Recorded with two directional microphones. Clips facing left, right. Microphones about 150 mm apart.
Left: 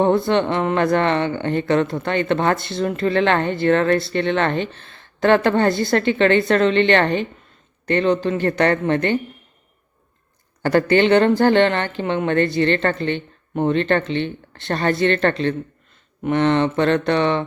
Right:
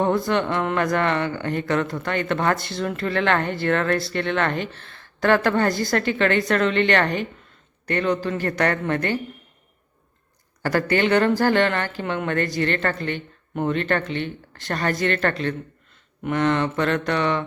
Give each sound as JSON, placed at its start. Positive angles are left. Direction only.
{"t": 0.0, "sound": "speech", "side_deg": 25}
{"t": 10.6, "sound": "speech", "side_deg": 25}